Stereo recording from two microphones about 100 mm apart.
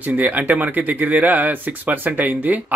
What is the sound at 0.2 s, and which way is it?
Speech, 15° right (ahead or behind).